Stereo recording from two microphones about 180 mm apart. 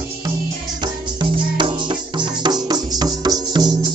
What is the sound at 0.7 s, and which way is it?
Music, 25° right (ahead or behind).